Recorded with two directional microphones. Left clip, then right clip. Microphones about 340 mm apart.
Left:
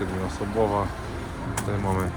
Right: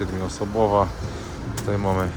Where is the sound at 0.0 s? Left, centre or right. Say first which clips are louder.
Right 2 dB; centre.